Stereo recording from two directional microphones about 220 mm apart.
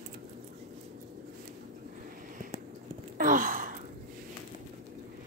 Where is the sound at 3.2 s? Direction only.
40° right (ahead or behind).